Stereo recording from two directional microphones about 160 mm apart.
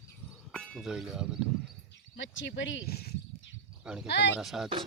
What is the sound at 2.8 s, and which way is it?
Speech, 80° left.